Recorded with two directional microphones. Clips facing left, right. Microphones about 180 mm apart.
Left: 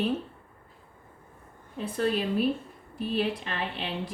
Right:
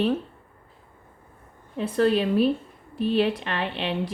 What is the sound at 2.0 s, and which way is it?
A woman's voice, 75° right (ahead or behind).